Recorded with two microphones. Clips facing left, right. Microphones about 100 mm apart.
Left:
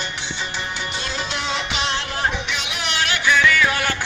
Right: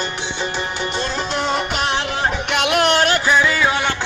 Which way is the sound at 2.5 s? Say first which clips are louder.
Right 11 dB; 55° right (ahead or behind).